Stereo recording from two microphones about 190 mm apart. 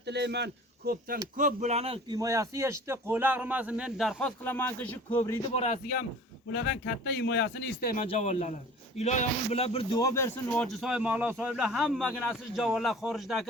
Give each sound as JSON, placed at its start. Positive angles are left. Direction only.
{"t": 0.0, "sound": "speech", "side_deg": -60}
{"t": 1.4, "sound": "a man's voice", "side_deg": -40}
{"t": 4.4, "sound": "speech", "side_deg": 10}
{"t": 5.5, "sound": "speech", "side_deg": 40}
{"t": 6.5, "sound": "speech", "side_deg": 60}
{"t": 7.9, "sound": "speech", "side_deg": 35}
{"t": 10.0, "sound": "speech", "side_deg": 15}
{"t": 10.8, "sound": "a man's voice", "side_deg": -5}